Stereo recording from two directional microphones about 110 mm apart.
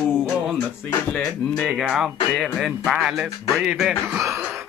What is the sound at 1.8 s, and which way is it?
Speech, 5° right (ahead or behind).